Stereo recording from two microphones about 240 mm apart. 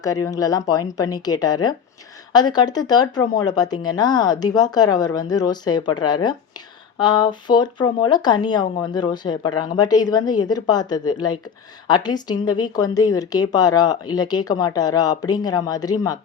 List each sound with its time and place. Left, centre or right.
0.3 s a woman's voice: centre